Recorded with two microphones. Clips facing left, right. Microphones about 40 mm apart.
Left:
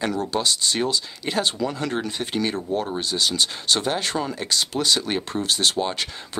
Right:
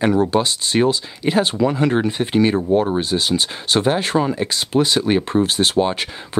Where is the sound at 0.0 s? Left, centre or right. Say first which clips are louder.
Right 7 dB; right.